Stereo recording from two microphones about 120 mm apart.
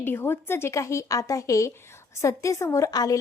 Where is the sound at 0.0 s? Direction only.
20° left (ahead or behind).